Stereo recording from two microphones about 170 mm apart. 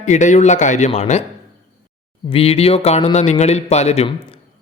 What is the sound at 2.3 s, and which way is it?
A man's voice, 35° left (ahead or behind).